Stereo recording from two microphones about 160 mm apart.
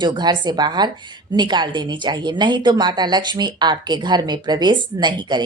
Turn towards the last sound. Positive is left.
turn(degrees=-25)  # may be behind; listen again after turning